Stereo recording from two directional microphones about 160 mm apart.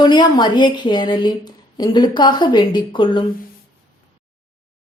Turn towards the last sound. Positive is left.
turn(degrees=30)  # may be behind; listen again after turning